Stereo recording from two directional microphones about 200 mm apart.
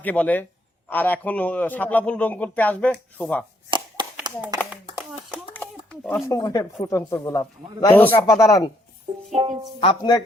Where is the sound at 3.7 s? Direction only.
25° right (ahead or behind).